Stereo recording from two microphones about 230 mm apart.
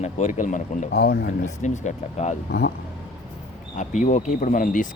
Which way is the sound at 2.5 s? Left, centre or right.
Left.